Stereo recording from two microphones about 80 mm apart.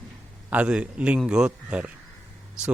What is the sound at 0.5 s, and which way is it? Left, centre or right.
Speech, centre.